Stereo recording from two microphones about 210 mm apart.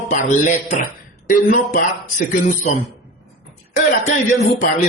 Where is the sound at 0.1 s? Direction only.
40° left (ahead or behind).